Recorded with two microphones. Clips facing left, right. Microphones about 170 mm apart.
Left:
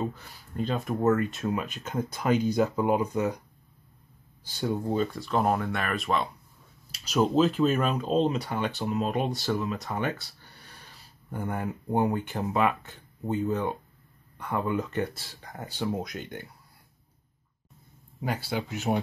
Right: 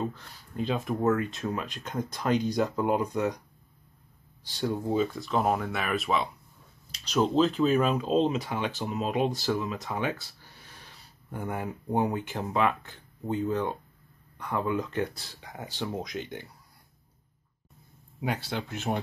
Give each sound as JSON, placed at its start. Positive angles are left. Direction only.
{"t": 0.0, "sound": "speech", "side_deg": 5}
{"t": 4.5, "sound": "speech", "side_deg": 0}
{"t": 18.2, "sound": "speech", "side_deg": 0}